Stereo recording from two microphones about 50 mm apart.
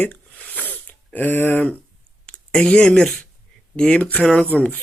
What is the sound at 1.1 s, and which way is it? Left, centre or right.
Speech, left.